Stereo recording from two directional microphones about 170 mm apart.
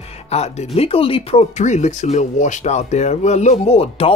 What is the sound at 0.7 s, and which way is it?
Speech, 35° left (ahead or behind).